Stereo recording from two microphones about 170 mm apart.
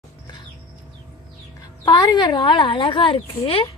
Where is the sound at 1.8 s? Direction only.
25° left (ahead or behind).